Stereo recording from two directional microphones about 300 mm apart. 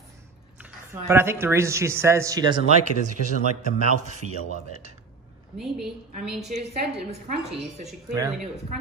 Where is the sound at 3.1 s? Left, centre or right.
Right.